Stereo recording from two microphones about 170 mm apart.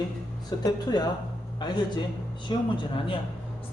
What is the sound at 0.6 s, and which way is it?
A man's voice, 25° left (ahead or behind).